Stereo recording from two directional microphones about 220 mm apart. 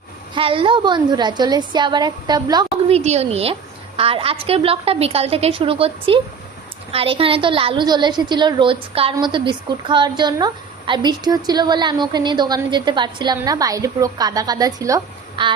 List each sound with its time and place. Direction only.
0.3 s a woman's voice: 25° right (ahead or behind)
3.0 s a woman's voice: 30° right (ahead or behind)